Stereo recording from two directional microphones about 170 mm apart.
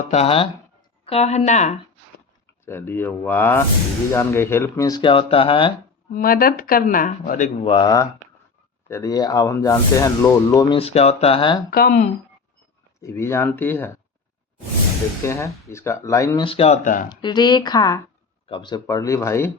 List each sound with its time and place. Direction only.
0.1 s speech: 35° left (ahead or behind)
2.6 s speech: 15° left (ahead or behind); by 5.7 s 30° left (ahead or behind)
6.1 s speech: 60° left (ahead or behind)
7.7 s speech: 25° left (ahead or behind)
10.8 s speech: 35° left (ahead or behind)
11.7 s speech: 60° left (ahead or behind)
13.0 s speech: 15° left (ahead or behind)
15.2 s speech: 15° left (ahead or behind)
16.5 s speech: 35° left (ahead or behind)
17.1 s speech: 25° left (ahead or behind)